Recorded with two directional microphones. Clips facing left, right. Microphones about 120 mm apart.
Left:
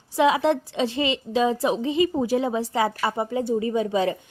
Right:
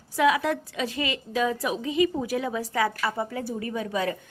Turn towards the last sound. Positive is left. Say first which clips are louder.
# left 6 dB
turn(degrees=25)  # may be behind; listen again after turning